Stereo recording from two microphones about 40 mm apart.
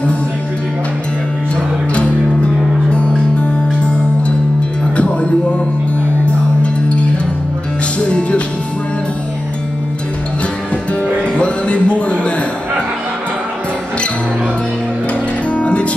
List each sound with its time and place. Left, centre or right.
2.0 s music: left
8.1 s music: left
11.3 s music: left
15.5 s music: left